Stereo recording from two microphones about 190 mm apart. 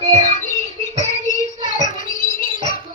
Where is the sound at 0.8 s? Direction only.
40° left (ahead or behind).